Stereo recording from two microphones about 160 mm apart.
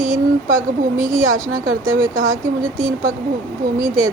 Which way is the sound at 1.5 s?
20° right (ahead or behind).